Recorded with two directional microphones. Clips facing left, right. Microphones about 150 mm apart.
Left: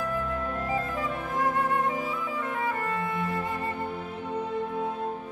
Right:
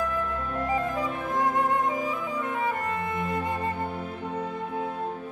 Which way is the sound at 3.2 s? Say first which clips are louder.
Right 1 dB; 20° right (ahead or behind).